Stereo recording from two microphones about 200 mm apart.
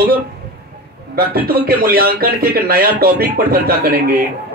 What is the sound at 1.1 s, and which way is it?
Speech, 50° right (ahead or behind).